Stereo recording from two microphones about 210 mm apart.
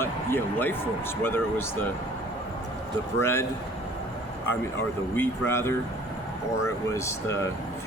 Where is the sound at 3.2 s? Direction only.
10° left (ahead or behind).